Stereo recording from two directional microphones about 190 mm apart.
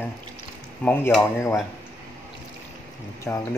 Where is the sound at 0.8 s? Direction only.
10° left (ahead or behind).